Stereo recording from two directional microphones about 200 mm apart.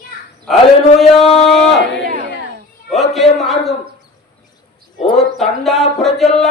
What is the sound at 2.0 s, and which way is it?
Crowd, 45° right (ahead or behind).